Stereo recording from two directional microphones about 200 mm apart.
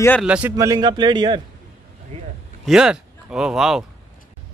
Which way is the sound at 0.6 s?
20° right (ahead or behind).